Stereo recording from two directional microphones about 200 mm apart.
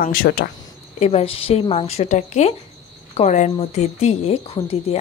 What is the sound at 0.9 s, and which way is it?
Speech, 30° left (ahead or behind).